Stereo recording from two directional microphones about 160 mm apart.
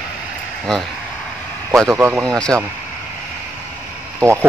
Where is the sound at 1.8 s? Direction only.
15° right (ahead or behind).